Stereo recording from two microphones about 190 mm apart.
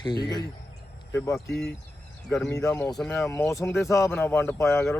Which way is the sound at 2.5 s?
15° left (ahead or behind).